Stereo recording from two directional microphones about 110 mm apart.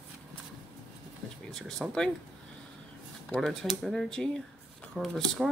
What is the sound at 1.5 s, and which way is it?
Speech, 5° left (ahead or behind).